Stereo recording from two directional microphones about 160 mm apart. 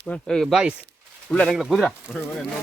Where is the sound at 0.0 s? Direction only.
5° left (ahead or behind).